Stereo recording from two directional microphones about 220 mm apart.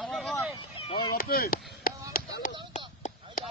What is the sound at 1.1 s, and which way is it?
Chop, 40° left (ahead or behind).